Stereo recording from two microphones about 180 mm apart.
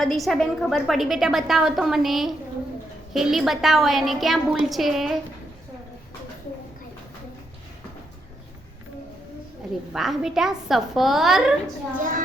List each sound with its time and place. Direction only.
0.0 s a woman's voice: centre (ahead or behind)
9.9 s a woman's voice: centre (ahead or behind)
11.9 s a woman's voice: 45° right (ahead or behind)